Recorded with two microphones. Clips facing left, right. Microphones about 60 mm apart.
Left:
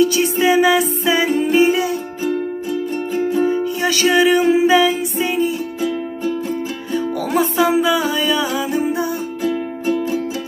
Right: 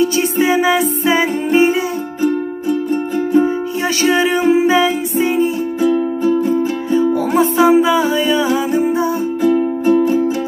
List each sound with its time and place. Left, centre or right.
0.0 s music: right
3.3 s music: right
6.9 s music: right
9.4 s music: right